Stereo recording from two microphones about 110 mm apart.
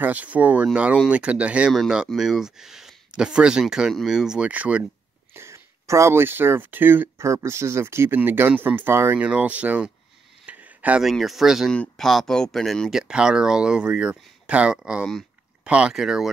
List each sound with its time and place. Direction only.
0.0 s speech: 15° right (ahead or behind)
5.3 s speech: 25° right (ahead or behind)
10.4 s a sound: 15° right (ahead or behind)
11.1 s speech: centre (ahead or behind)
13.0 s speech: 10° right (ahead or behind)